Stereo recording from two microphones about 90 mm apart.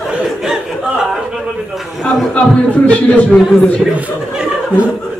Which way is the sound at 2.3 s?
15° left (ahead or behind).